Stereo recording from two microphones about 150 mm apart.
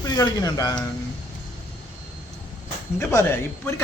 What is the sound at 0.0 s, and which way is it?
Speech, 25° left (ahead or behind).